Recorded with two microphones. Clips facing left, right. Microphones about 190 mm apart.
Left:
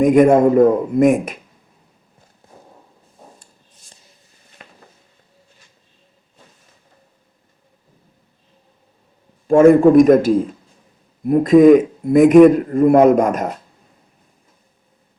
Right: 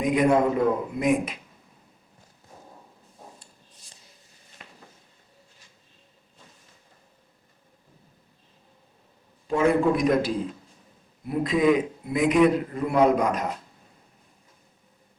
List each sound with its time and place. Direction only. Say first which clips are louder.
0.0 s a man's voice: left 10 dB; 45° left (ahead or behind)
3.4 s a sound: left 1 dB; 50° left (ahead or behind)
9.5 s a man's voice: left 12 dB; 45° left (ahead or behind)